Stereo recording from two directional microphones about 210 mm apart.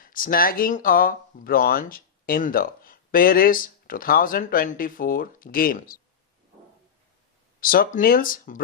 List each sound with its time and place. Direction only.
0.0 s speech: 40° left (ahead or behind)
7.6 s speech: 40° left (ahead or behind)